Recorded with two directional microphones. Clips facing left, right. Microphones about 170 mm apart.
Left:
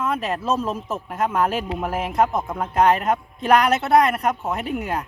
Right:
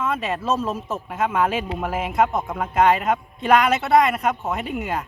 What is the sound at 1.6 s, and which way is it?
A man's voice, 10° left (ahead or behind).